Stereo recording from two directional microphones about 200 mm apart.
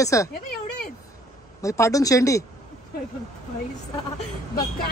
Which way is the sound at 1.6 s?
15° left (ahead or behind).